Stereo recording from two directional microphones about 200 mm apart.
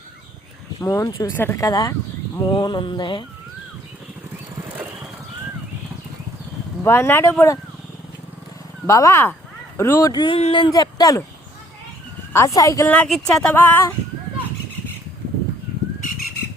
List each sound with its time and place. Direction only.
0.8 s speech: 15° left (ahead or behind)
6.8 s speech: 10° left (ahead or behind)
8.9 s speech: 15° left (ahead or behind)
12.3 s speech: 15° left (ahead or behind)